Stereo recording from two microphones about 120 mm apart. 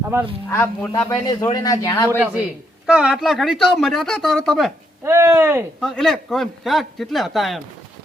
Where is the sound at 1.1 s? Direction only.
35° left (ahead or behind).